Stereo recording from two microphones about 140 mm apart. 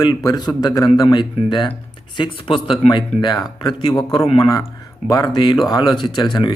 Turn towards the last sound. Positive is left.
turn(degrees=35)  # may be behind; listen again after turning